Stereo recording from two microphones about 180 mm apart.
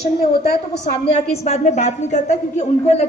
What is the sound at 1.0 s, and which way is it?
A woman's voice, 35° left (ahead or behind).